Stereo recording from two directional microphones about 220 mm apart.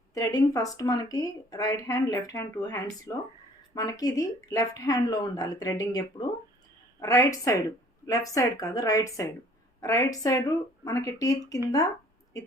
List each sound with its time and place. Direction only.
0.1 s speech: 15° left (ahead or behind)